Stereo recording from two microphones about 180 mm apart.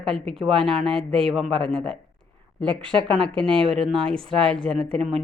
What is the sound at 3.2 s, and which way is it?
Speech, 5° left (ahead or behind).